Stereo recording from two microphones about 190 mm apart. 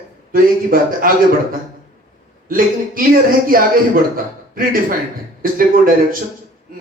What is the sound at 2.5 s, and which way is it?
Speech, 45° right (ahead or behind).